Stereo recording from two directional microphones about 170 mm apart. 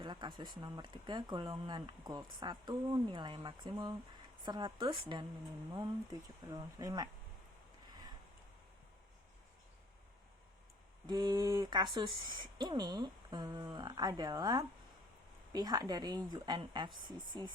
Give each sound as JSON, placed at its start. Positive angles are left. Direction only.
{"t": 0.0, "sound": "speech", "side_deg": -25}
{"t": 6.4, "sound": "speech", "side_deg": -20}
{"t": 11.0, "sound": "speech", "side_deg": -25}